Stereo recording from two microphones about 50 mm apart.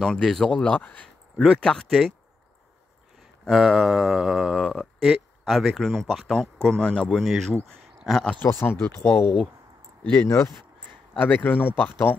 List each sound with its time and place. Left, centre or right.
0.0 s speech: centre
0.5 s speech: left
1.4 s speech: centre
3.4 s speech: centre
6.3 s speech: centre
7.2 s speech: centre
7.6 s a sound: centre
8.4 s speech: left
10.2 s speech: left
11.1 s speech: left